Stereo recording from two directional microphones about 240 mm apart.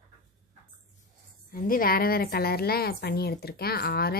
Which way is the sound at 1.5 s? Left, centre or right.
Left.